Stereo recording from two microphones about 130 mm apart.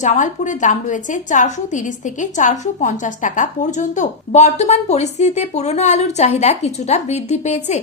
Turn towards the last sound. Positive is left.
turn(degrees=65)  # may be behind; listen again after turning